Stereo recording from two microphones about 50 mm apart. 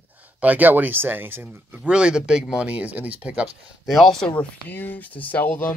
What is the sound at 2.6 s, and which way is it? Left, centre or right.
Speech, right.